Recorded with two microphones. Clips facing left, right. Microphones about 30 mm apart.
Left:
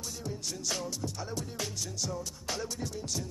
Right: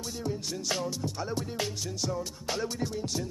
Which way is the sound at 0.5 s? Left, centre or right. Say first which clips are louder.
Right 1 dB; right.